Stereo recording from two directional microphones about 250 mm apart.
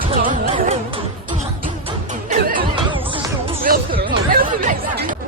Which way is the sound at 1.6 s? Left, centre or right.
Right.